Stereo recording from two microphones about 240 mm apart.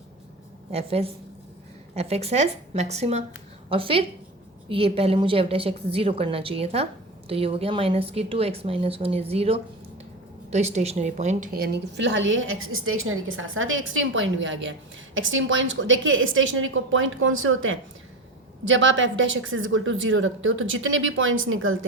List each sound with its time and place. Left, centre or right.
0.7 s a woman's voice: right